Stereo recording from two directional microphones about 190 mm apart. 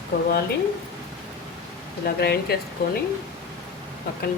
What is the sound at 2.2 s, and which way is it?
Speech, 55° left (ahead or behind).